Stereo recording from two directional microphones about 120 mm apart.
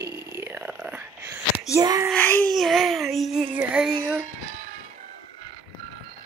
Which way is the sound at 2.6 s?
Centre (ahead or behind).